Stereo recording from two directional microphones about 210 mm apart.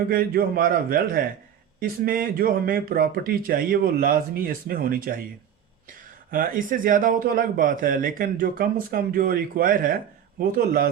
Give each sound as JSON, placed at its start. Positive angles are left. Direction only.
{"t": 0.1, "sound": "speech", "side_deg": -45}
{"t": 6.3, "sound": "a man's voice", "side_deg": -40}